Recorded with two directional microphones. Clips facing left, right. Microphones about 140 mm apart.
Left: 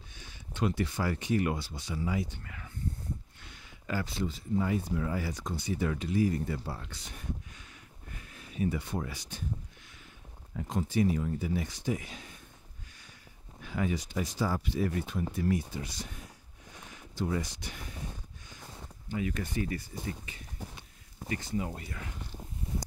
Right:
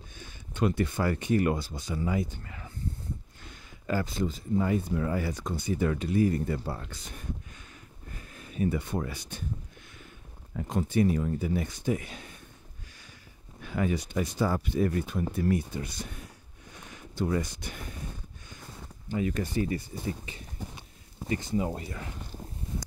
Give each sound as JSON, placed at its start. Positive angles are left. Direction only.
{"t": 0.2, "sound": "speech", "side_deg": -50}
{"t": 2.4, "sound": "speech", "side_deg": -30}
{"t": 3.4, "sound": "speech", "side_deg": -45}
{"t": 10.5, "sound": "speech", "side_deg": -60}
{"t": 13.6, "sound": "speech", "side_deg": -55}
{"t": 19.0, "sound": "speech", "side_deg": -35}